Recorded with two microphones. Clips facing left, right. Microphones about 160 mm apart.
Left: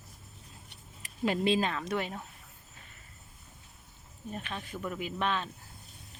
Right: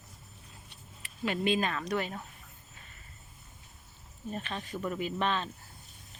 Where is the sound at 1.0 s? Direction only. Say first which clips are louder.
Left 2 dB; 35° left (ahead or behind).